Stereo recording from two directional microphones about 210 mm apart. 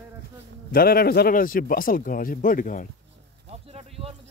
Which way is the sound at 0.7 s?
45° left (ahead or behind).